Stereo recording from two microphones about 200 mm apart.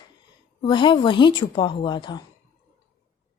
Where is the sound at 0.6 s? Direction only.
25° left (ahead or behind).